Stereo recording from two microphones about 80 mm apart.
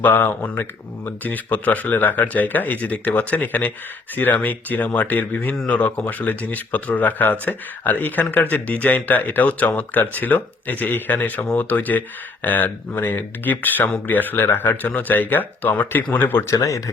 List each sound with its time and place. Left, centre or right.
0.0 s speech: left
16.5 s speech: left